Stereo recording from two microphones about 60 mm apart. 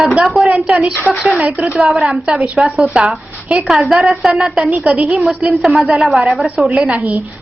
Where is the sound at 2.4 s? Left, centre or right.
Centre.